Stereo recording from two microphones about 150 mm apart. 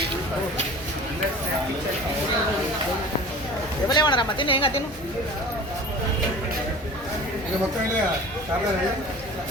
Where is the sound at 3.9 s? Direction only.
30° left (ahead or behind).